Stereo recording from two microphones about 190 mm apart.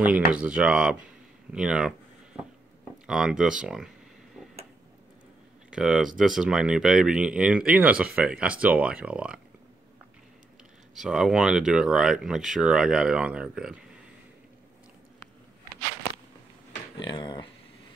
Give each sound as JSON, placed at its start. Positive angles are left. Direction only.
{"t": 0.3, "sound": "speech", "side_deg": -5}
{"t": 1.5, "sound": "a sound", "side_deg": -5}
{"t": 3.1, "sound": "speech", "side_deg": -5}
{"t": 5.7, "sound": "speech", "side_deg": -5}
{"t": 11.0, "sound": "speech", "side_deg": 0}
{"t": 17.0, "sound": "a sound", "side_deg": 25}